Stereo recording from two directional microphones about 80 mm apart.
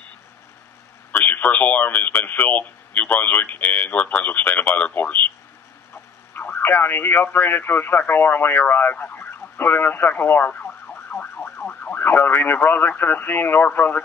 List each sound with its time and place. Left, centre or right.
1.1 s speech: left
6.3 s speech: left